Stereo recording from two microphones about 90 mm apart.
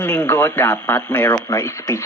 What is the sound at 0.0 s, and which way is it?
Speech, 25° left (ahead or behind).